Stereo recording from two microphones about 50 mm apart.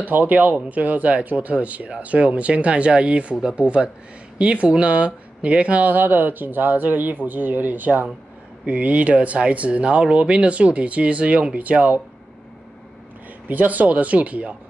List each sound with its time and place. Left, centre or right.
0.0 s speech: right
13.5 s speech: right